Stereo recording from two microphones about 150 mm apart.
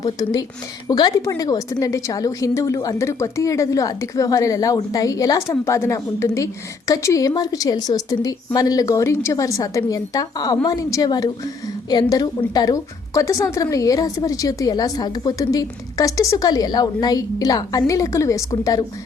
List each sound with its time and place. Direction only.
0.0 s a woman's voice: 25° left (ahead or behind)